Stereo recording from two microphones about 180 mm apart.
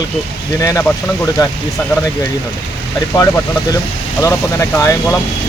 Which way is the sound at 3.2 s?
15° left (ahead or behind).